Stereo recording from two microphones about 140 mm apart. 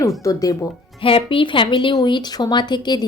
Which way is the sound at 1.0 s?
40° left (ahead or behind).